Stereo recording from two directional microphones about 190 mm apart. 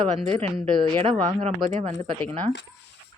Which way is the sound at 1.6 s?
40° right (ahead or behind).